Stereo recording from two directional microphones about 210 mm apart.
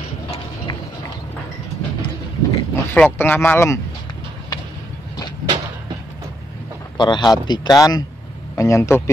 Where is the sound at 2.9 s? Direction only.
10° left (ahead or behind).